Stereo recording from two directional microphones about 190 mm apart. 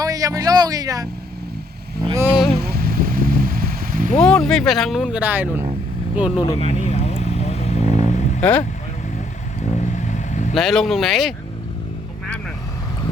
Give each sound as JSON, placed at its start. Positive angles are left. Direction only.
{"t": 0.0, "sound": "a man's voice", "side_deg": -20}
{"t": 2.1, "sound": "speech", "side_deg": -5}
{"t": 2.6, "sound": "vehicle", "side_deg": -50}
{"t": 4.1, "sound": "speech", "side_deg": 5}
{"t": 6.6, "sound": "vehicle", "side_deg": 35}
{"t": 7.9, "sound": "vehicle", "side_deg": -25}
{"t": 8.1, "sound": "vehicle", "side_deg": 40}
{"t": 9.9, "sound": "vehicle", "side_deg": 40}
{"t": 10.5, "sound": "speech", "side_deg": 0}